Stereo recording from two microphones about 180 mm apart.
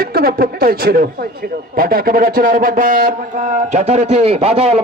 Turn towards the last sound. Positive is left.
turn(degrees=-35)  # may be behind; listen again after turning